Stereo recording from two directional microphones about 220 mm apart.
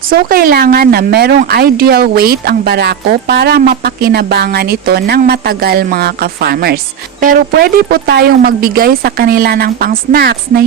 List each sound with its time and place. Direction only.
0.1 s speech: 40° right (ahead or behind)